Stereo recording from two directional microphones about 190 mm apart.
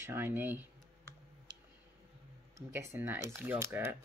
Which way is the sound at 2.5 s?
15° right (ahead or behind).